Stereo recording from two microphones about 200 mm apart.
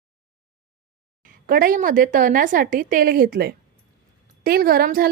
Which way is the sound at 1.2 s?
45° right (ahead or behind).